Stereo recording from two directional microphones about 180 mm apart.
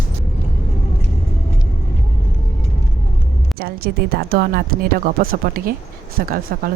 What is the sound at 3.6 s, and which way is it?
Speech, 55° right (ahead or behind).